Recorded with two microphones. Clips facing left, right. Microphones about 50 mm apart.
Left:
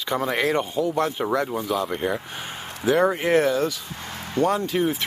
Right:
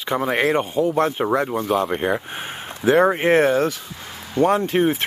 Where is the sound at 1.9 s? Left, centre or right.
Right.